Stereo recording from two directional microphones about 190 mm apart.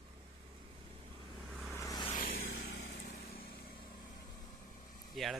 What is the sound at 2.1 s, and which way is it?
Vehicle, 50° left (ahead or behind).